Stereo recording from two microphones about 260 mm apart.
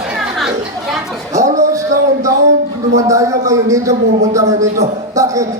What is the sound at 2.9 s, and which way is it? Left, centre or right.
A man's voice, centre.